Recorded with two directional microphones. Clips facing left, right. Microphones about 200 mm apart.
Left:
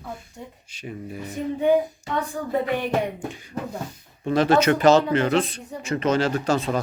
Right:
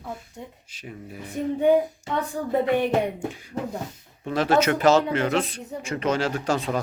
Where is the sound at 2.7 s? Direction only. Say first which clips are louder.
Right 2 dB; 25° right (ahead or behind).